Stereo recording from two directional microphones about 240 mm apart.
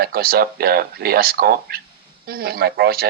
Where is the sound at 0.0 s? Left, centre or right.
Right.